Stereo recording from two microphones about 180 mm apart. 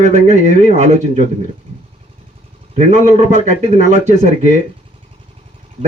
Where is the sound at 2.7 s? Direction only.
40° right (ahead or behind).